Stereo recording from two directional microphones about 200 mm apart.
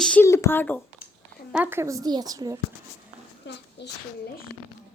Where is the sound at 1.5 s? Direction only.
10° right (ahead or behind).